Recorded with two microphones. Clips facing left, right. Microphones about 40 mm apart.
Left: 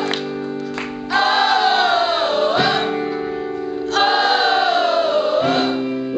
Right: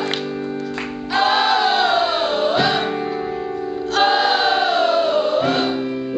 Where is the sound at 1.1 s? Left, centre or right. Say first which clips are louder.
Left 1 dB; centre.